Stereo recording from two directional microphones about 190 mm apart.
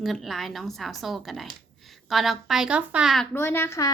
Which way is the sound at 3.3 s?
10° left (ahead or behind).